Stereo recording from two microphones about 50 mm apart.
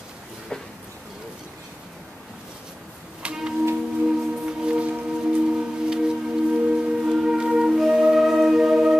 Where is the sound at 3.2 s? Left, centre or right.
Centre.